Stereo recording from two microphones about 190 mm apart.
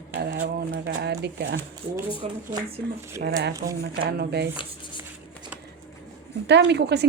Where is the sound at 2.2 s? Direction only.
35° right (ahead or behind).